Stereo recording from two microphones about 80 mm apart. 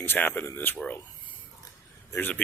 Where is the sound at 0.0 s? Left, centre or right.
Left.